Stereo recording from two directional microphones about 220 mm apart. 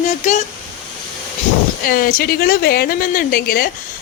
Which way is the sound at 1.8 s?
40° left (ahead or behind).